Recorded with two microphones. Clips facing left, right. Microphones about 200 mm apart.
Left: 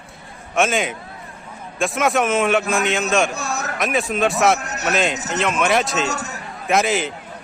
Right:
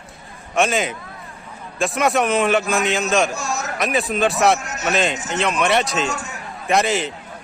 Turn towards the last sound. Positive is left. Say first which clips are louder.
# even
turn(degrees=0)  # may be behind; listen again after turning